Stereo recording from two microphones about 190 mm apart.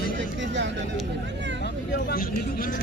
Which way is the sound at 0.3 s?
70° right (ahead or behind).